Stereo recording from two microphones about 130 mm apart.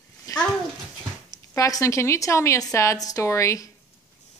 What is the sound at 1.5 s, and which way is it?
A woman's voice, 25° left (ahead or behind).